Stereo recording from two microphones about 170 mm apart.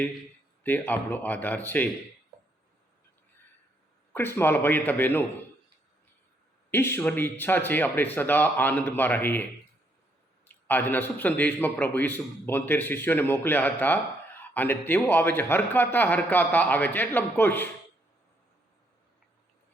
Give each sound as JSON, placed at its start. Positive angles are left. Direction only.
{"t": 0.6, "sound": "a man's voice", "side_deg": 10}
{"t": 4.1, "sound": "a man's voice", "side_deg": 15}
{"t": 6.7, "sound": "a man's voice", "side_deg": 15}
{"t": 10.7, "sound": "a man's voice", "side_deg": 10}